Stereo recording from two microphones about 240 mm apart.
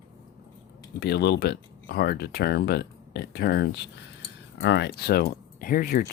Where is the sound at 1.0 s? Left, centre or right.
Left.